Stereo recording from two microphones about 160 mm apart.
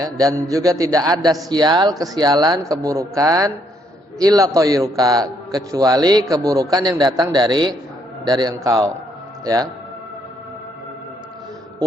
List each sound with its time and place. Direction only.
0.0 s a man's voice: 20° right (ahead or behind)